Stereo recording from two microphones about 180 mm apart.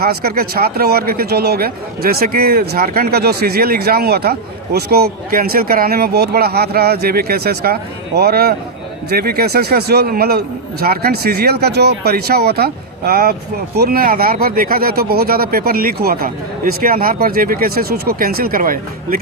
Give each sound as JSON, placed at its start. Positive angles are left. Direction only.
{"t": 0.0, "sound": "speech", "side_deg": -60}